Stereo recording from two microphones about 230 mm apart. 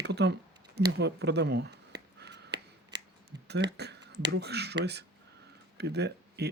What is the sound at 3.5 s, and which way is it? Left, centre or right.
Speech, right.